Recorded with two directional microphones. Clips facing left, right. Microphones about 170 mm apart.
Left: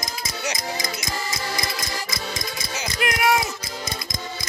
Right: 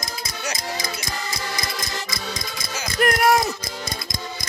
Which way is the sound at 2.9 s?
45° right (ahead or behind).